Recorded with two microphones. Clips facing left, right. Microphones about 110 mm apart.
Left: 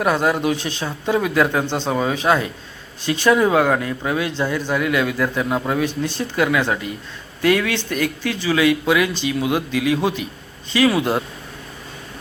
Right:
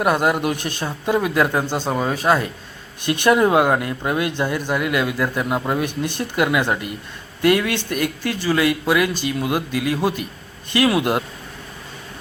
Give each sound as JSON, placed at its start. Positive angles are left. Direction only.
{"t": 0.0, "sound": "speech", "side_deg": -5}
{"t": 0.5, "sound": "speech", "side_deg": -50}
{"t": 0.8, "sound": "speech", "side_deg": -10}
{"t": 3.0, "sound": "speech", "side_deg": -55}
{"t": 3.2, "sound": "speech", "side_deg": -5}
{"t": 5.8, "sound": "speech", "side_deg": -15}